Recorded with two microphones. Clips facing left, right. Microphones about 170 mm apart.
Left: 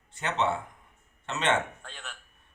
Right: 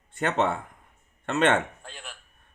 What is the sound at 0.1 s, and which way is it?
A man's voice, 50° right (ahead or behind).